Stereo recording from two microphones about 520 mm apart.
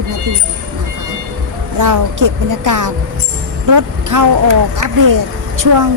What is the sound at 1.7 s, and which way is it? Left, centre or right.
A woman's voice, right.